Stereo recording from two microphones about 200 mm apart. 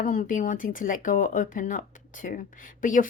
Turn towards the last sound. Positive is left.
turn(degrees=40)  # may be behind; listen again after turning